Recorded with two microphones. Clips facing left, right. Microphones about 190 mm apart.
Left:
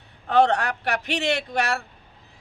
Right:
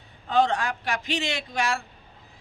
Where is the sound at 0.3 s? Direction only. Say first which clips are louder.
Left 3 dB; 65° left (ahead or behind).